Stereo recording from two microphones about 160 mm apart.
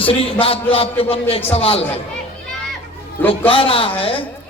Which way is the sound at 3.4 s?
35° left (ahead or behind).